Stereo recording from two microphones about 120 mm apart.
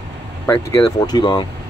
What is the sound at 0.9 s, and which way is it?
Speech, 35° left (ahead or behind).